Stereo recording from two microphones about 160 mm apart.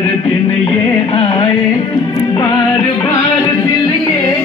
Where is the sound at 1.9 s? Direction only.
20° left (ahead or behind).